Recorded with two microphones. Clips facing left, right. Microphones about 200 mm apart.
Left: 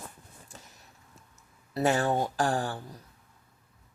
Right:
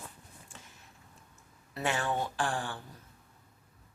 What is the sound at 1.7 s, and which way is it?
Speech, 40° left (ahead or behind).